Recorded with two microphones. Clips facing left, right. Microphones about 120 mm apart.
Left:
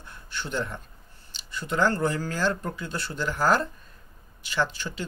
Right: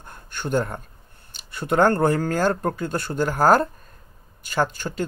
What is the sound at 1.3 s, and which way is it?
Speech, 55° right (ahead or behind).